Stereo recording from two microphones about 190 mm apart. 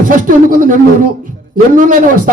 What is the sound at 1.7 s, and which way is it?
Speech, 45° right (ahead or behind).